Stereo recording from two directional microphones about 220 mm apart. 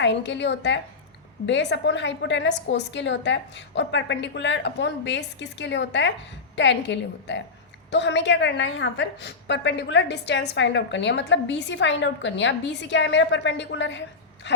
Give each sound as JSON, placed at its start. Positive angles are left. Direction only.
{"t": 0.0, "sound": "a woman's voice", "side_deg": 55}